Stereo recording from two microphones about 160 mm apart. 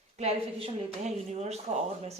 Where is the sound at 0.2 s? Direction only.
45° right (ahead or behind).